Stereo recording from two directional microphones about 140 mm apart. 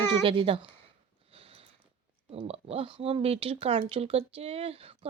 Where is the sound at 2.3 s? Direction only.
45° right (ahead or behind).